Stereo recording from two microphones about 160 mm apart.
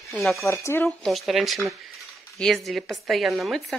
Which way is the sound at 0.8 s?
Centre (ahead or behind).